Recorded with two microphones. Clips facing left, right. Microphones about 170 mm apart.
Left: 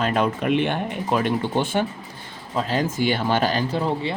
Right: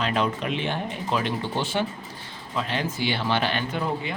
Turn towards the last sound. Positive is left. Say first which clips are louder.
# left 4 dB
turn(degrees=30)  # may be behind; listen again after turning